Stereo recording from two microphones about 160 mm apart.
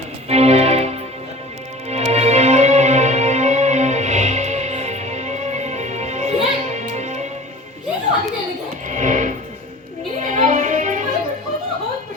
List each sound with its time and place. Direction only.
0.3 s music: 40° right (ahead or behind)
1.9 s music: 45° right (ahead or behind)
8.9 s music: 50° right (ahead or behind)